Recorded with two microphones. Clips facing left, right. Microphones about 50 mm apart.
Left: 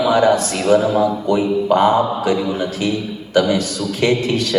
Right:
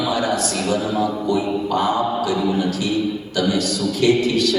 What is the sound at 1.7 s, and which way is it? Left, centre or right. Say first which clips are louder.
A man's voice: left 7 dB; left.